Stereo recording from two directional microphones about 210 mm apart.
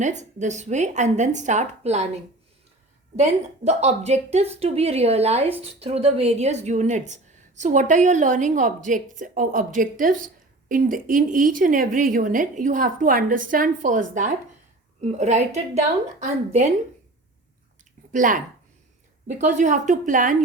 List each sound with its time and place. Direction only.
0.0 s speech: 35° right (ahead or behind)
3.2 s speech: 30° right (ahead or behind)
18.1 s speech: 40° right (ahead or behind)